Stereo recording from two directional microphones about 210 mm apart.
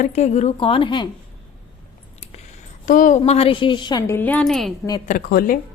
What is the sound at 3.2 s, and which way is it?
A woman's voice, 25° left (ahead or behind).